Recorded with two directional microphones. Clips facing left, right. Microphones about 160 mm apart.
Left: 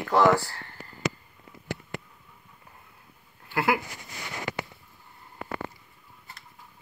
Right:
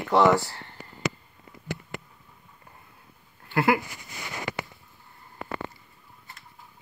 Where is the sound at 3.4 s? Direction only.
5° left (ahead or behind).